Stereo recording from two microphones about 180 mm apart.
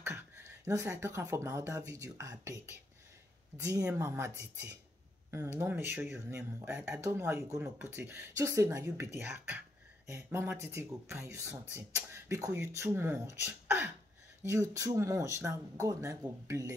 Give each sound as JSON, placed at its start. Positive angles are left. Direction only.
{"t": 0.0, "sound": "speech", "side_deg": -15}
{"t": 5.3, "sound": "speech", "side_deg": -15}